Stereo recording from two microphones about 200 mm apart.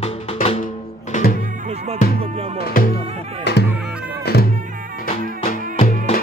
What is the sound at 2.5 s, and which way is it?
Speech, 45° left (ahead or behind).